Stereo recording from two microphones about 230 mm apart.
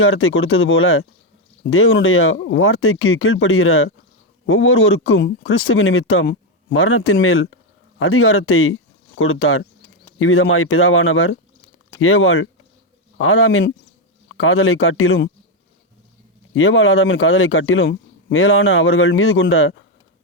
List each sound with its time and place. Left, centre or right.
0.0 s a man's voice: left
16.6 s a man's voice: left